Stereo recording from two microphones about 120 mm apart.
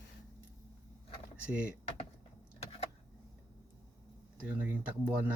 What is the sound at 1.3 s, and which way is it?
Speech, 10° right (ahead or behind).